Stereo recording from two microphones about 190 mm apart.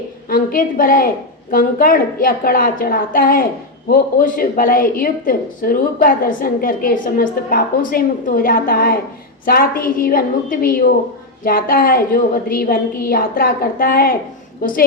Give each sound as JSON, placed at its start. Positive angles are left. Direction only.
{"t": 0.3, "sound": "a woman's voice", "side_deg": 45}